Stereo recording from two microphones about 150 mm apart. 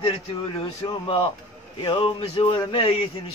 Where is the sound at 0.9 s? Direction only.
35° left (ahead or behind).